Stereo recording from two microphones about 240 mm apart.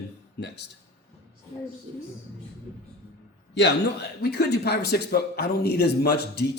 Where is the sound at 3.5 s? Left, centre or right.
Left.